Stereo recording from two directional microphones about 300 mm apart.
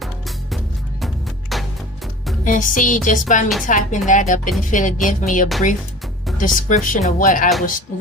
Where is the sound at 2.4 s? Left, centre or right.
Left.